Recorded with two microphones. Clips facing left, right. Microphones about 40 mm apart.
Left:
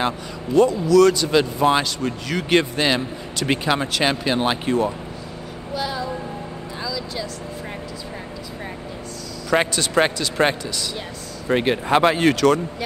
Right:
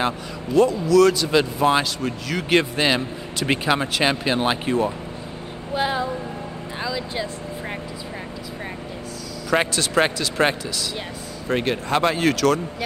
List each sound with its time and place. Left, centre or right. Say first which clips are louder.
0.6 s speech: left 1 dB; centre
5.7 s a sound: right 3 dB; right
9.5 s speech: left 1 dB; centre
11.4 s speech: left 3 dB; centre